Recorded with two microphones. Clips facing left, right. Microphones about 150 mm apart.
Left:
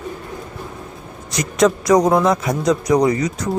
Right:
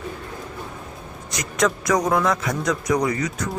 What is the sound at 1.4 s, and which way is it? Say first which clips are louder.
Speech: left 6 dB; 20° left (ahead or behind).